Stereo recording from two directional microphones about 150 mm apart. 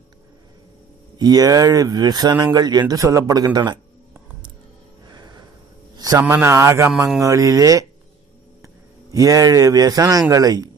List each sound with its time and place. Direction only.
1.1 s speech: 25° right (ahead or behind)
5.0 s a sound: 30° right (ahead or behind)
6.1 s a man's voice: 15° right (ahead or behind)
9.1 s speech: 25° right (ahead or behind)